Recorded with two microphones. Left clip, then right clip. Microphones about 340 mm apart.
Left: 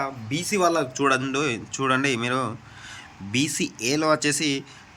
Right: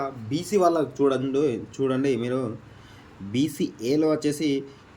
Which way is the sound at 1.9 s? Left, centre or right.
Centre.